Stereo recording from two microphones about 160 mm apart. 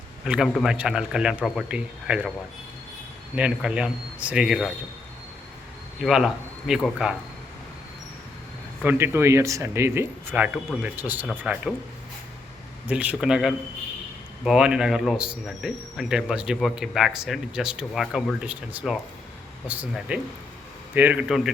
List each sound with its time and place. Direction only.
0.3 s speech: centre (ahead or behind)
3.3 s speech: 5° right (ahead or behind)
6.0 s speech: centre (ahead or behind)
8.8 s speech: 15° right (ahead or behind)
12.9 s speech: 10° right (ahead or behind)